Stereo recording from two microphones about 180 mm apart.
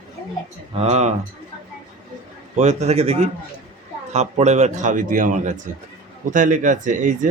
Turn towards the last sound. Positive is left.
turn(degrees=-45)  # may be behind; listen again after turning